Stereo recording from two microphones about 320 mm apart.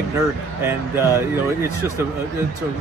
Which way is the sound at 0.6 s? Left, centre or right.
Centre.